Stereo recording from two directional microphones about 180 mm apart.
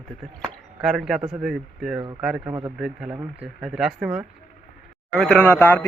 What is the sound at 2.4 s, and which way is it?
Speech, 20° right (ahead or behind).